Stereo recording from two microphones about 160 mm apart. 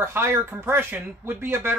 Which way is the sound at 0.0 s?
15° right (ahead or behind).